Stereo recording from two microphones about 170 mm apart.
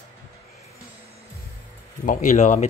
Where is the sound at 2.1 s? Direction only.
50° left (ahead or behind).